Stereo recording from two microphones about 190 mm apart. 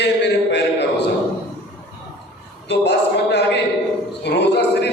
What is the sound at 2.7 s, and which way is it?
A man's voice, 65° left (ahead or behind).